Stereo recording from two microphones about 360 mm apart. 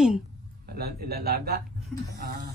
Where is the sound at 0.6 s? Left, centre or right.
Right.